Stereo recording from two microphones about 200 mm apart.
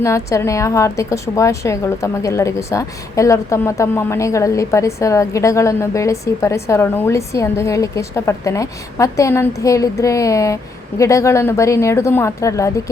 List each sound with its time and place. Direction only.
0.0 s a woman's voice: 15° left (ahead or behind)